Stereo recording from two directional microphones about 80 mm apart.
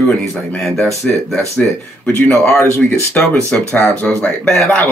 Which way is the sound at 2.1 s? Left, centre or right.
Left.